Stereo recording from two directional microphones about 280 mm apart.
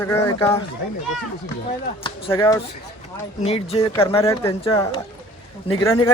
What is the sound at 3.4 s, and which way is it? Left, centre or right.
A man's voice, left.